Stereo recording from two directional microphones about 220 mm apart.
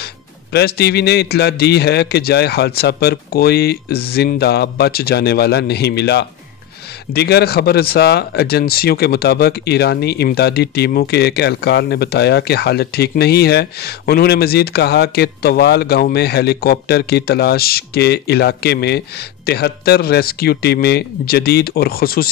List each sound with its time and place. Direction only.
0.5 s speech: 45° left (ahead or behind)